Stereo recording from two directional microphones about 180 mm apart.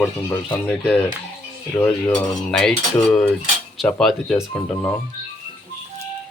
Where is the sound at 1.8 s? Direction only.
15° left (ahead or behind).